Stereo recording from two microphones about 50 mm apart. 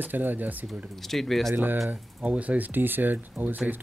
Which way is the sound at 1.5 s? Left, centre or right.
Right.